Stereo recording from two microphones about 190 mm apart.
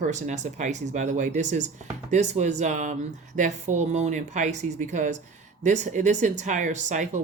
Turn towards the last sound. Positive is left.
turn(degrees=-40)  # may be behind; listen again after turning